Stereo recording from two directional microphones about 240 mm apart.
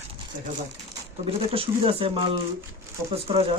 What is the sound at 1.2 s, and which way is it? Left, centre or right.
Speech, right.